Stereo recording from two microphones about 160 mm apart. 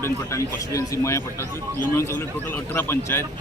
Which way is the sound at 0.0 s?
20° left (ahead or behind).